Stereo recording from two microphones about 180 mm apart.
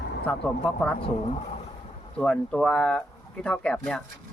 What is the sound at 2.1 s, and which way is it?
A man's voice, 5° left (ahead or behind).